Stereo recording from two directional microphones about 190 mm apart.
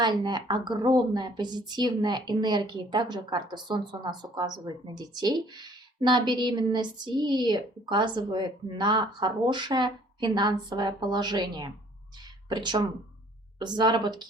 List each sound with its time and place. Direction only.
0.0 s speech: 20° right (ahead or behind)